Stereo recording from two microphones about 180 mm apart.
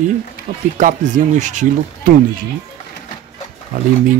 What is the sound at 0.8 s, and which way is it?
Speech, 45° right (ahead or behind).